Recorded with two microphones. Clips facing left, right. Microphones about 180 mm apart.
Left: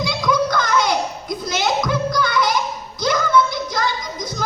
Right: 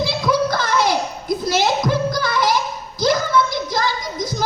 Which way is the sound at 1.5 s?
35° right (ahead or behind).